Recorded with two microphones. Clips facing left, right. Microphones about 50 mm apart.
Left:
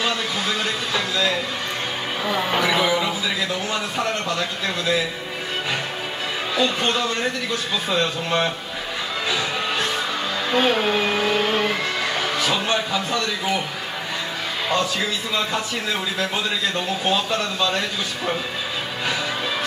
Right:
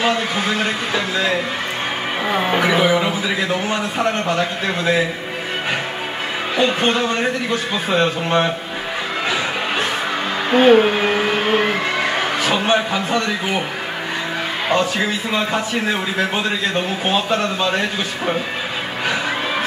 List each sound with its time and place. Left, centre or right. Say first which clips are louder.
0.0 s a sound: right 5 dB; right
4.4 s speech: right 5 dB; right
6.5 s speech: right 4 dB; right
7.9 s a man's voice: right 5 dB; right
10.5 s a sound: right 8 dB; right
14.7 s a man's voice: right 4 dB; right
16.7 s a man's voice: right 3 dB; right